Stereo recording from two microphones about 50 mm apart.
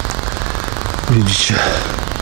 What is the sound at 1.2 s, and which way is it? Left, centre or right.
Speech, centre.